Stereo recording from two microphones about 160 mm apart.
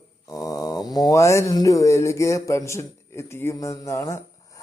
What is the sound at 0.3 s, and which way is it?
A man's voice, 20° left (ahead or behind).